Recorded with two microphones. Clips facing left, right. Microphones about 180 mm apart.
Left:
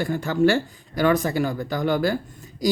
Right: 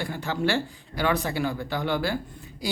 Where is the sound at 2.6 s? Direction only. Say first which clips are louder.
Left 9 dB; 40° left (ahead or behind).